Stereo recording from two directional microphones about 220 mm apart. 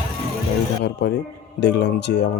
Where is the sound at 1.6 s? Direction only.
50° left (ahead or behind).